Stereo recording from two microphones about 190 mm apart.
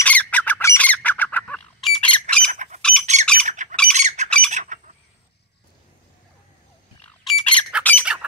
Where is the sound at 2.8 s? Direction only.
5° left (ahead or behind).